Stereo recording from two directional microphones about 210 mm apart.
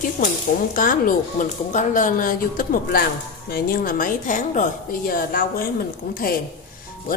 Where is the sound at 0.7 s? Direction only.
40° left (ahead or behind).